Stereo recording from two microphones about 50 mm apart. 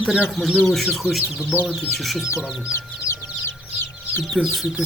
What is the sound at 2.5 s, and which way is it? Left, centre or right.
Speech, centre.